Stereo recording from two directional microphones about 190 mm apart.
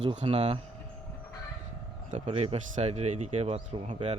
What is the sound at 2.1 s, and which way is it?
Speech, 35° right (ahead or behind).